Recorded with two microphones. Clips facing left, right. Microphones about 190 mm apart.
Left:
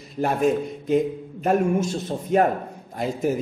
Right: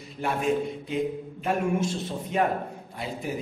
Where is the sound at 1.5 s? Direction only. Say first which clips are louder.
Left 5 dB; 40° left (ahead or behind).